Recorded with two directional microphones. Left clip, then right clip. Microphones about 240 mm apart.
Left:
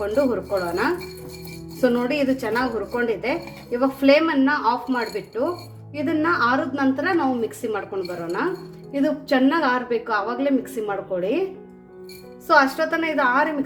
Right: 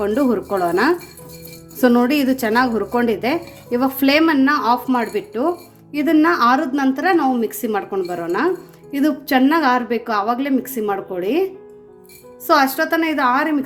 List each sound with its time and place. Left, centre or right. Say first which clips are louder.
0.0 s speech: right 3 dB; right
12.5 s speech: right 2 dB; right